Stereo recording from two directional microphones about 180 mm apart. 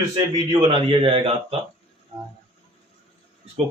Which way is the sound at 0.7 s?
30° right (ahead or behind).